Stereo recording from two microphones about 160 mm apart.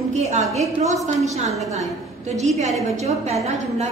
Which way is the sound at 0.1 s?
45° right (ahead or behind).